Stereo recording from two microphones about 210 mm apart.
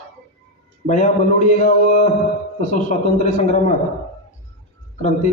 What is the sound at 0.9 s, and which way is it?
A man's voice, 35° left (ahead or behind).